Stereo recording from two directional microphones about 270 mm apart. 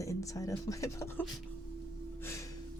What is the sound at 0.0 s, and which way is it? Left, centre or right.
Speech, centre.